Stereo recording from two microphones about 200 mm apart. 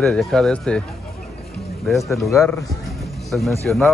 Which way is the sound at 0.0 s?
5° left (ahead or behind).